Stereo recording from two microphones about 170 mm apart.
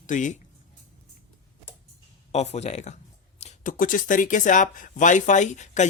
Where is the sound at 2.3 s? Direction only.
40° left (ahead or behind).